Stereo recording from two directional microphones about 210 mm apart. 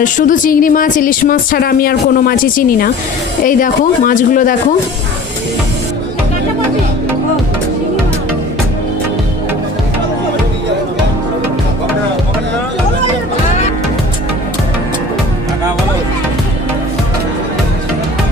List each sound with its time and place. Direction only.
0.0 s speech: 40° left (ahead or behind)